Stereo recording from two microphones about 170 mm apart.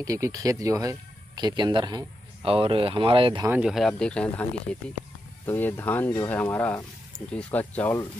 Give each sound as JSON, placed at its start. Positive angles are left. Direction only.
{"t": 0.0, "sound": "speech", "side_deg": -20}
{"t": 3.4, "sound": "speech", "side_deg": -5}